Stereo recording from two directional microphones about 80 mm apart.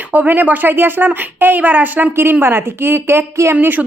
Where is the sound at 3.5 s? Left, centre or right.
Right.